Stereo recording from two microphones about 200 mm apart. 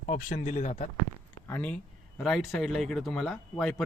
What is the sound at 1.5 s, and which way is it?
Speech, 5° left (ahead or behind).